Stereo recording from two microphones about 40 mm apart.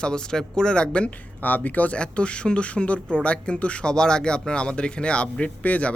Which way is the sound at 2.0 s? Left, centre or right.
Left.